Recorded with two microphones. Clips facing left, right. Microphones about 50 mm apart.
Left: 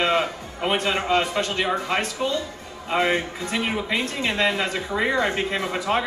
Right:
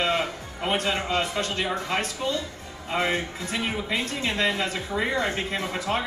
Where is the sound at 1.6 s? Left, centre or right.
Centre.